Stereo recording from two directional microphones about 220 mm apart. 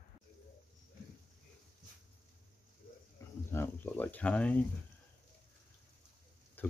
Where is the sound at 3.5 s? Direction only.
10° left (ahead or behind).